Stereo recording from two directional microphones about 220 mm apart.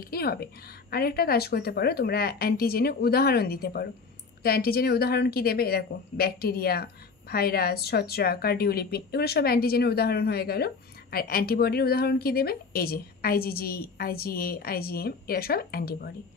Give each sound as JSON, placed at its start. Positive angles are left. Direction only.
{"t": 0.1, "sound": "speech", "side_deg": 45}